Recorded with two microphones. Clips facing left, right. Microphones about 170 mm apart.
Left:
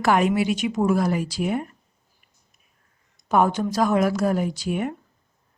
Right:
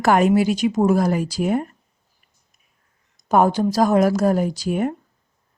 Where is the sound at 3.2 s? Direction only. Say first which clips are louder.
Right 3 dB; 40° right (ahead or behind).